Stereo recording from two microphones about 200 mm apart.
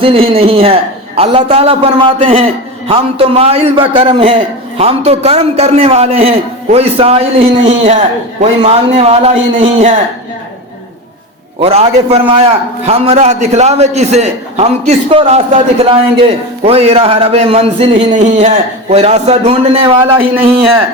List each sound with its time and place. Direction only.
0.0 s a man's voice: 30° right (ahead or behind)
11.6 s a man's voice: 30° right (ahead or behind)